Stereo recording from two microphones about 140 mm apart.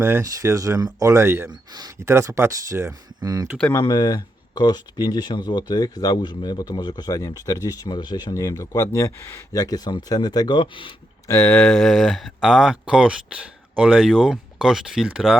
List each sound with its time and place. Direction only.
0.0 s speech: 20° right (ahead or behind)
1.5 s speech: 30° right (ahead or behind)
3.7 s speech: 30° left (ahead or behind)
11.3 s speech: 15° left (ahead or behind); by 15.4 s 5° right (ahead or behind)